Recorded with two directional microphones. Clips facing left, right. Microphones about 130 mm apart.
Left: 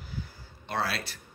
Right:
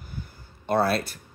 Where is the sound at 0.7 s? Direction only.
50° right (ahead or behind).